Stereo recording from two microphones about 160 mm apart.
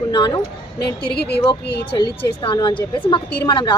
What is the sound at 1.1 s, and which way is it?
Speech, 90° left.